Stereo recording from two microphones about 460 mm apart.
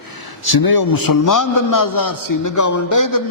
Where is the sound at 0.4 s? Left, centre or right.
Left.